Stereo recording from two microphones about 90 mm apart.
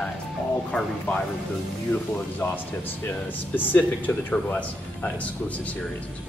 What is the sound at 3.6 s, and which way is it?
Speech, 20° left (ahead or behind).